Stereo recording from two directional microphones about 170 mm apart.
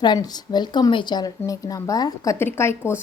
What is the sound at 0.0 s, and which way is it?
A woman's voice, 25° left (ahead or behind).